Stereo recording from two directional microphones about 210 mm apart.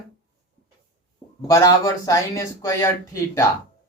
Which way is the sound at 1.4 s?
15° left (ahead or behind).